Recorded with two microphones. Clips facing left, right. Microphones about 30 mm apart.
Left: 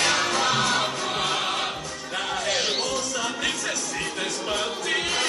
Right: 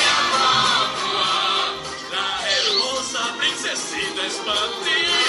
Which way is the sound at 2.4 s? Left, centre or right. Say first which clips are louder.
Right 5 dB; right.